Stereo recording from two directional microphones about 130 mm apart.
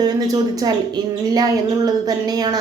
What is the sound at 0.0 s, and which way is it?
A woman's voice, 30° right (ahead or behind).